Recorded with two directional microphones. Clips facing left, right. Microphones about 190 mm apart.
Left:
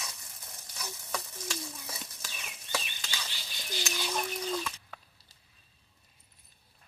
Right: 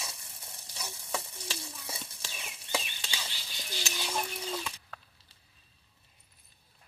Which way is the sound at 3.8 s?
10° right (ahead or behind).